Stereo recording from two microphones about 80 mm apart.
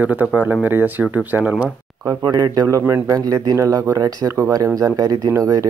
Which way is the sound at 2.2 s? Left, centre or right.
Right.